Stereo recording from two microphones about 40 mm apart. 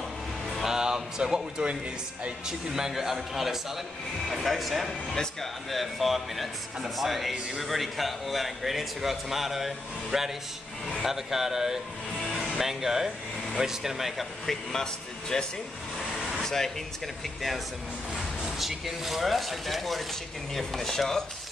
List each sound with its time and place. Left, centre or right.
0.6 s speech: centre
4.8 s speech: centre
5.7 s speech: centre
12.2 s music: centre
12.5 s speech: centre
14.4 s speech: centre
16.2 s air conditioning: centre
16.4 s speech: centre
17.2 s speech: centre
18.6 s speech: centre